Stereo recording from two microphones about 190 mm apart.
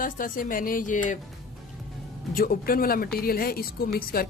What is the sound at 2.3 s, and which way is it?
Speech, 50° left (ahead or behind).